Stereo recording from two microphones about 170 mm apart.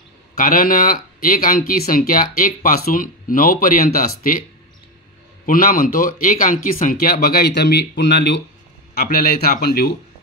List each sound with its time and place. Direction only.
0.4 s speech: 55° left (ahead or behind)
5.5 s speech: 55° left (ahead or behind); by 8.4 s 90° left
8.9 s speech: 65° left (ahead or behind)